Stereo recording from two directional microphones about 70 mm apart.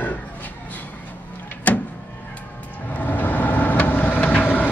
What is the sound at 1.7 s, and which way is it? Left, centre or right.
Power windows, left.